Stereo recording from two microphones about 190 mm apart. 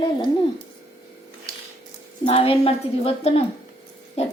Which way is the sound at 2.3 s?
30° left (ahead or behind).